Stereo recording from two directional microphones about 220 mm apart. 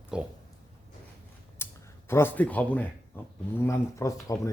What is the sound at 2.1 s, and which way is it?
Speech, 10° left (ahead or behind).